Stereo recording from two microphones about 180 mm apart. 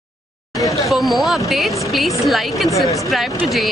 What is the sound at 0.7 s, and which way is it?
Chatter, 20° left (ahead or behind).